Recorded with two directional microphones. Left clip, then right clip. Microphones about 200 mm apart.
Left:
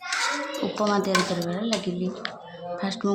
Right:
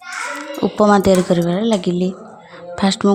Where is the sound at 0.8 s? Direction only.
40° right (ahead or behind).